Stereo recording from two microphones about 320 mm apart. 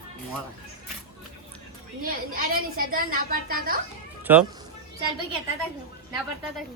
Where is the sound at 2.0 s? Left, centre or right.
Right.